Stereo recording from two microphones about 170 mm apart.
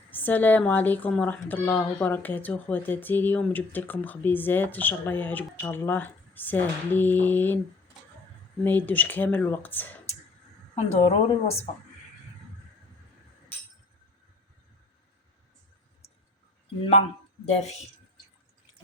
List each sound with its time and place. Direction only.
0.1 s a woman's voice: 10° left (ahead or behind)
8.6 s a woman's voice: 10° left (ahead or behind)
10.8 s a woman's voice: 35° left (ahead or behind)
17.4 s a woman's voice: 40° left (ahead or behind)